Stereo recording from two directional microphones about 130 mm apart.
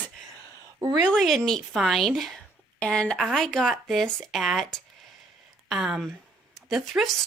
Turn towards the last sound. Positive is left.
turn(degrees=0)  # may be behind; listen again after turning